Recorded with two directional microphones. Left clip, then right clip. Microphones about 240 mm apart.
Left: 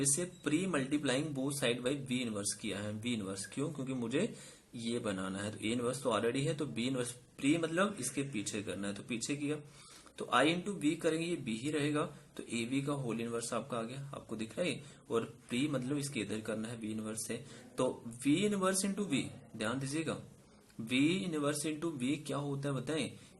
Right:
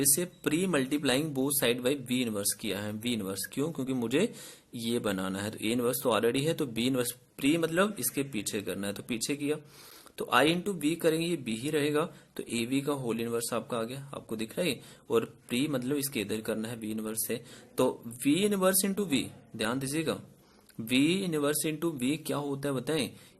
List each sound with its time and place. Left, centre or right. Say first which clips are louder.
0.0 s a man's voice: right 6 dB; right